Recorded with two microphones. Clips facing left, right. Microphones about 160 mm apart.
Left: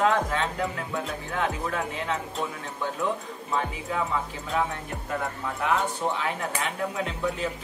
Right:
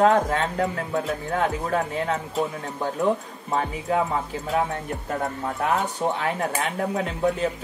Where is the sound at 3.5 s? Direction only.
40° right (ahead or behind).